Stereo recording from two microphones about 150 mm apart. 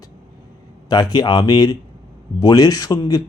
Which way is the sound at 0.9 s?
25° left (ahead or behind).